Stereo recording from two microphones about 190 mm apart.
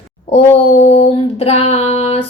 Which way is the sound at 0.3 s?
30° left (ahead or behind).